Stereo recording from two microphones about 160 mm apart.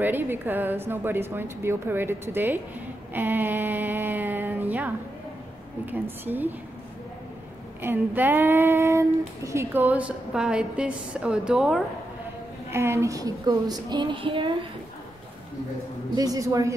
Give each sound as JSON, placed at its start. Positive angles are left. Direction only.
{"t": 0.0, "sound": "female singing", "side_deg": -15}
{"t": 3.1, "sound": "a sound", "side_deg": -10}
{"t": 5.9, "sound": "female singing", "side_deg": -10}
{"t": 7.8, "sound": "female singing", "side_deg": -10}
{"t": 12.7, "sound": "female singing", "side_deg": -15}
{"t": 16.2, "sound": "female singing", "side_deg": -20}